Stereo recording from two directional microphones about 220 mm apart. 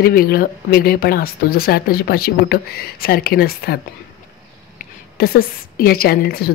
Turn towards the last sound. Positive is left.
turn(degrees=45)  # may be behind; listen again after turning